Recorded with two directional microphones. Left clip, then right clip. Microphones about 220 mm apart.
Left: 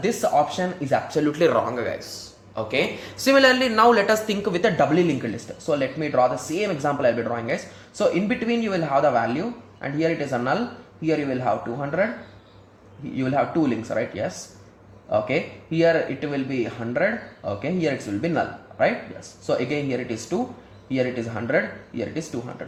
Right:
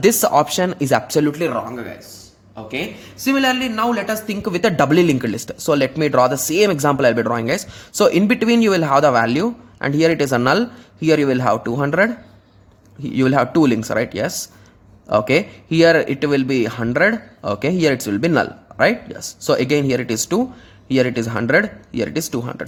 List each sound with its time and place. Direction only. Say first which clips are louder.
0.0 s speech: right 6 dB; 45° right (ahead or behind)
1.5 s a man's voice: left 2 dB; 15° right (ahead or behind)
4.4 s speech: right 5 dB; 40° right (ahead or behind)
13.1 s speech: right 7 dB; 45° right (ahead or behind)